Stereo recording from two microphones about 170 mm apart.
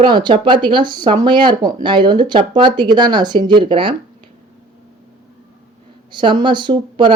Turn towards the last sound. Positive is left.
turn(degrees=-30)  # may be behind; listen again after turning